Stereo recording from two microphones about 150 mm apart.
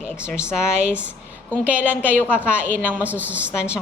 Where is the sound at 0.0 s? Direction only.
5° right (ahead or behind).